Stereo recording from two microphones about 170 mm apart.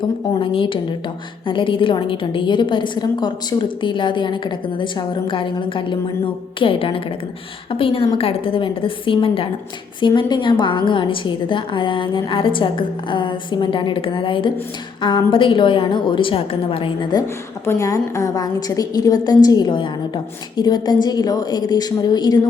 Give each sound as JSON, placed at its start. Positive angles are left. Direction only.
{"t": 0.3, "sound": "a woman's voice", "side_deg": 30}